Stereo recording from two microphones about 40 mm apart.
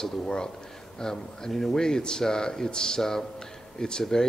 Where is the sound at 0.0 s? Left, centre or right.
Centre.